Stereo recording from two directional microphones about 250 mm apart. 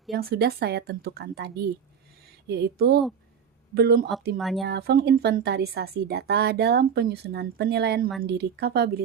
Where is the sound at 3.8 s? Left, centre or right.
Right.